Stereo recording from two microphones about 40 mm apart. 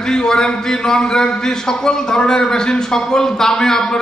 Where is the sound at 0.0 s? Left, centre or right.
Centre.